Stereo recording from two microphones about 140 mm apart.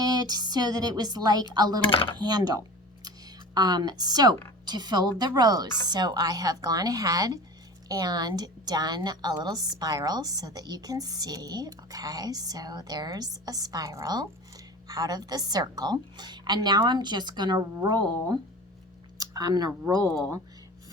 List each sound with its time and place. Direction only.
0.0 s a woman's voice: 30° right (ahead or behind)
1.9 s speech: 40° left (ahead or behind)
2.1 s a woman's voice: 30° right (ahead or behind)
20.1 s speech: 5° left (ahead or behind)